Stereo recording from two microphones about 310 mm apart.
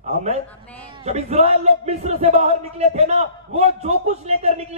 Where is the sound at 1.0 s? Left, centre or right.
Centre.